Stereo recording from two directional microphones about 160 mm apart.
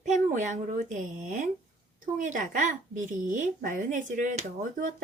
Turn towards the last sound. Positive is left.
turn(degrees=-55)  # may be behind; listen again after turning